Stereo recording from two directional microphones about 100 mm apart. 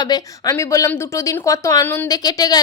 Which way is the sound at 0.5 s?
30° left (ahead or behind).